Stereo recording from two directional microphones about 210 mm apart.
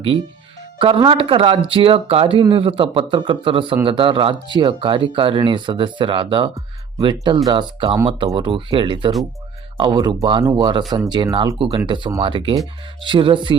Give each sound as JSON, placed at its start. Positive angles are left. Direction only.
{"t": 0.8, "sound": "speech", "side_deg": -25}